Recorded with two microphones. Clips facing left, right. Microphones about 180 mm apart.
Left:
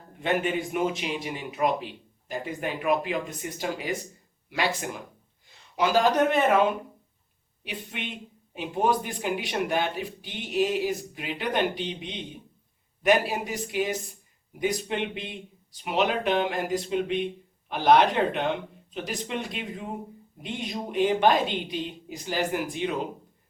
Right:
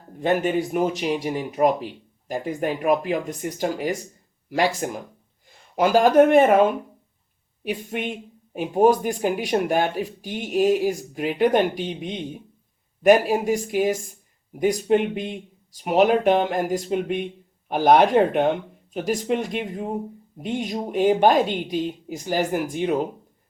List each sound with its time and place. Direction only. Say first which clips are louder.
0.2 s speech: right 5 dB; 40° right (ahead or behind)